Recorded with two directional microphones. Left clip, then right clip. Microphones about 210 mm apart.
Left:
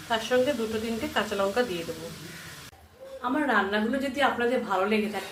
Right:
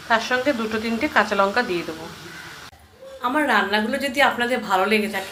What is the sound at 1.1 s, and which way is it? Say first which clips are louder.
Speech: right 8 dB; 20° right (ahead or behind).